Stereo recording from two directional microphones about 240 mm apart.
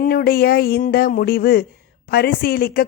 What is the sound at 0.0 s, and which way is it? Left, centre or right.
A man's voice, left.